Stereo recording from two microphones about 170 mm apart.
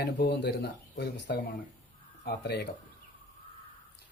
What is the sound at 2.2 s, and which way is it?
Speech, 70° left (ahead or behind).